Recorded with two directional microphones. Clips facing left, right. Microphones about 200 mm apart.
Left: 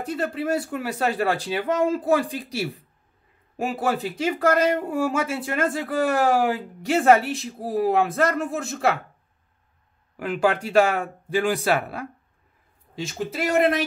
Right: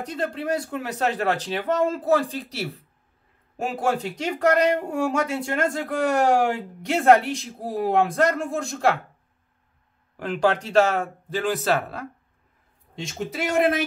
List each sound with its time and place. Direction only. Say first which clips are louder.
0.0 s speech: left 2 dB; 5° left (ahead or behind)
10.1 s speech: even; 10° left (ahead or behind)